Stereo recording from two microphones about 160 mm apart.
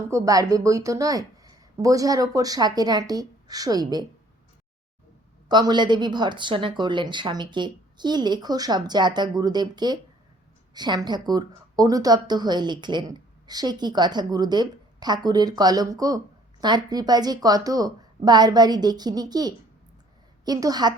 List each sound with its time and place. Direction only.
0.1 s speech: 20° right (ahead or behind)
5.5 s speech: 25° right (ahead or behind)